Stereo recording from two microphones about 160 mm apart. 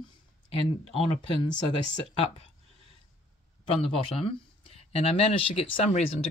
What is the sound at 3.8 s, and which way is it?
Speech, 35° left (ahead or behind).